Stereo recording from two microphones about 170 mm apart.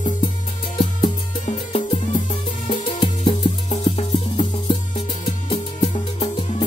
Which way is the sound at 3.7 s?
40° left (ahead or behind).